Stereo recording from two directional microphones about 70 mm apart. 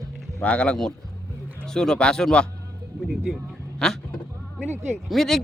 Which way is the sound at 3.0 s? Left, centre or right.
Centre.